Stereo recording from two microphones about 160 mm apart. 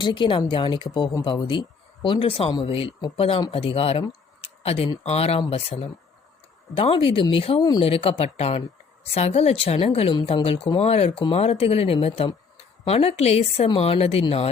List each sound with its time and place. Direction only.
0.0 s speech: 30° left (ahead or behind)
7.6 s speech: 25° left (ahead or behind)
7.9 s speech: 35° left (ahead or behind)